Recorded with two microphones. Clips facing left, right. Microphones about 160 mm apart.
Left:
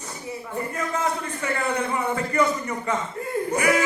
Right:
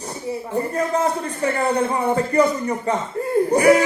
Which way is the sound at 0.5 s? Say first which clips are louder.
Right 7 dB; 35° right (ahead or behind).